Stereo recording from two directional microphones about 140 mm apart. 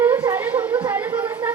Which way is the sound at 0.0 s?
15° right (ahead or behind).